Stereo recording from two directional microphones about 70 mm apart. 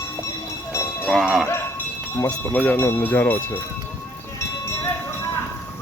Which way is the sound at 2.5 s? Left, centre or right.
Left.